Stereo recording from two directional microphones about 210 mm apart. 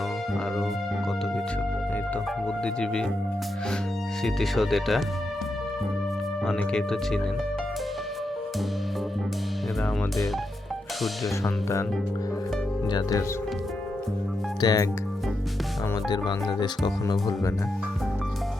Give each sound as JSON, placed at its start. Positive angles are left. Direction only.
{"t": 2.6, "sound": "speech", "side_deg": 5}
{"t": 4.2, "sound": "speech", "side_deg": 0}
{"t": 6.4, "sound": "speech", "side_deg": 5}
{"t": 11.4, "sound": "speech", "side_deg": 15}
{"t": 12.9, "sound": "speech", "side_deg": 15}
{"t": 14.6, "sound": "speech", "side_deg": 15}
{"t": 16.0, "sound": "speech", "side_deg": 20}